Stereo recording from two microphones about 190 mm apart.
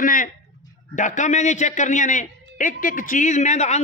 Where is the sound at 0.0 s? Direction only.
45° left (ahead or behind).